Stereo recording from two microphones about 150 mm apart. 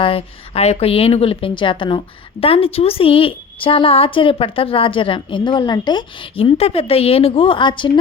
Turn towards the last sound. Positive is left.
turn(degrees=35)  # may be behind; listen again after turning